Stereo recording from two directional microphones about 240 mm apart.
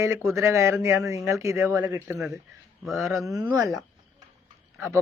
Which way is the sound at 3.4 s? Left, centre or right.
Centre.